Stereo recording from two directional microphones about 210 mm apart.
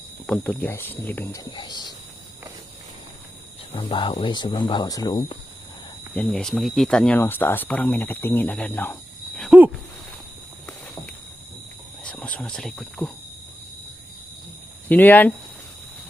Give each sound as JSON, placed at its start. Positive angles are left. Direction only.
{"t": 0.3, "sound": "speech", "side_deg": 10}
{"t": 1.5, "sound": "speech", "side_deg": 20}
{"t": 3.7, "sound": "speech", "side_deg": 25}
{"t": 6.1, "sound": "speech", "side_deg": 5}
{"t": 12.0, "sound": "speech", "side_deg": 5}
{"t": 14.8, "sound": "speech", "side_deg": 10}